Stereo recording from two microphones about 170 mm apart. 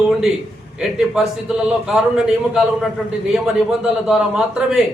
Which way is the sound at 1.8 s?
5° right (ahead or behind).